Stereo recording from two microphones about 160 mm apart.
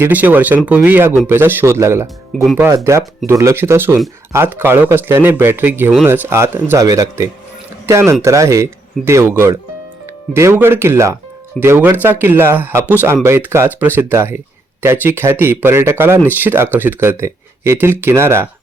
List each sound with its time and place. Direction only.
0.0 s speech: 10° right (ahead or behind)